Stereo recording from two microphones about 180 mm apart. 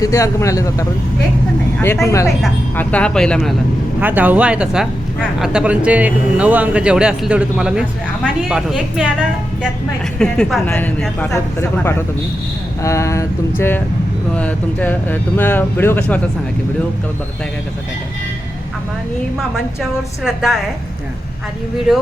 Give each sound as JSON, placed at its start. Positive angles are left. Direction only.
{"t": 0.0, "sound": "speech", "side_deg": 15}
{"t": 4.0, "sound": "speech", "side_deg": -10}
{"t": 10.2, "sound": "speech", "side_deg": 5}
{"t": 20.2, "sound": "speech", "side_deg": 0}
{"t": 21.9, "sound": "speech", "side_deg": -5}